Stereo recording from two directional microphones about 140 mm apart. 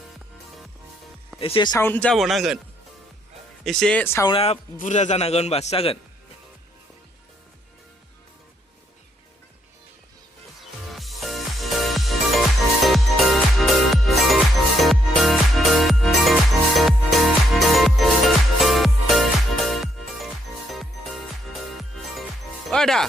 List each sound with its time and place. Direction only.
1.4 s speech: 40° left (ahead or behind)
1.8 s speech: 10° left (ahead or behind)
2.1 s a man's voice: centre (ahead or behind)
3.6 s speech: 5° left (ahead or behind)
4.3 s a man's voice: 45° left (ahead or behind)
4.8 s a man's voice: 60° left (ahead or behind)
10.9 s music: centre (ahead or behind)